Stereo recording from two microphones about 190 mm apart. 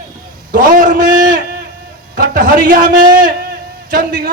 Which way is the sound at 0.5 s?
45° right (ahead or behind).